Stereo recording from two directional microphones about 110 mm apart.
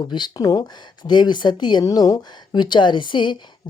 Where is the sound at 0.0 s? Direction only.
40° left (ahead or behind).